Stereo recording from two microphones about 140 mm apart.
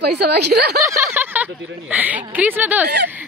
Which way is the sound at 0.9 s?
15° right (ahead or behind).